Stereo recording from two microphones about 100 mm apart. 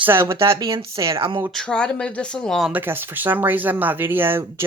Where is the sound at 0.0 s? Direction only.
25° right (ahead or behind).